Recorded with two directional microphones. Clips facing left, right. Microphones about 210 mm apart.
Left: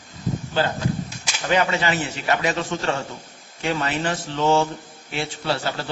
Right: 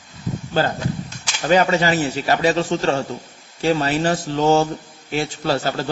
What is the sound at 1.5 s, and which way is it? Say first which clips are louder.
A man's voice: right 5 dB; 40° right (ahead or behind).